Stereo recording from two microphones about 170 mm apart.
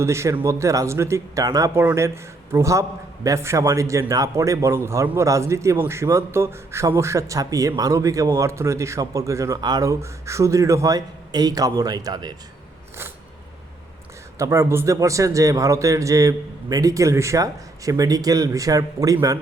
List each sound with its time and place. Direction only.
0.0 s a man's voice: 15° right (ahead or behind)
14.3 s a man's voice: 15° right (ahead or behind)